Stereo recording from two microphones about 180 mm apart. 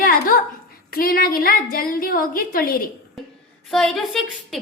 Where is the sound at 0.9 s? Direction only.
55° left (ahead or behind).